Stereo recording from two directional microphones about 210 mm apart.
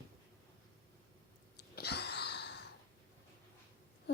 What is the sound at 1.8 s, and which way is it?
Wheeze, 50° left (ahead or behind).